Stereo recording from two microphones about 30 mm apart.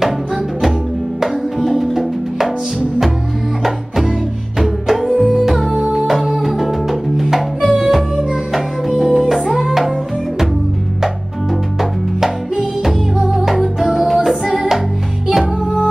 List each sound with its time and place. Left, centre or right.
1.2 s music: centre
3.6 s music: centre
5.2 s music: right
5.5 s music: centre
5.9 s music: centre
6.1 s music: centre
12.8 s music: centre